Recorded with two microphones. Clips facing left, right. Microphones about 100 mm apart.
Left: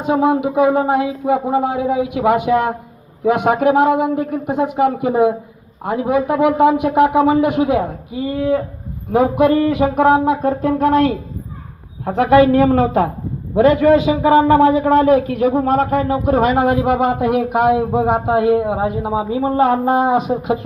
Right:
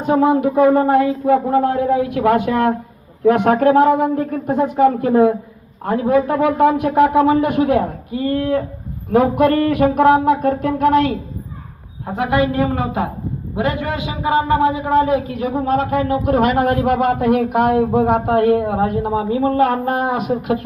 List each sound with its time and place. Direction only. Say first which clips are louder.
0.0 s speech: right 1 dB; 10° left (ahead or behind)
9.1 s a sound: even; 20° left (ahead or behind); by 10.8 s 35° left (ahead or behind)
12.0 s a woman's voice: left 6 dB; 90° left
14.1 s speech: left 5 dB; 90° left; by 15.5 s 70° left (ahead or behind)
15.5 s a man's voice: right 2 dB; 50° left (ahead or behind); by 16.6 s 30° left (ahead or behind)
16.8 s speech: left 1 dB; 15° left (ahead or behind)
17.1 s speech: right 1 dB; 5° left (ahead or behind)
19.9 s a sound: left 4 dB; 25° left (ahead or behind)